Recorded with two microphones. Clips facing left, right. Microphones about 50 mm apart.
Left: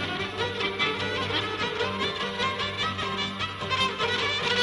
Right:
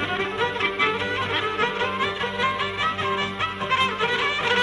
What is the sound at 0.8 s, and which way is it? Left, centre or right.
Music, centre.